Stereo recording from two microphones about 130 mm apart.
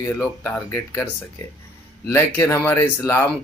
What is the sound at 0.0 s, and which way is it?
Speech, 25° left (ahead or behind).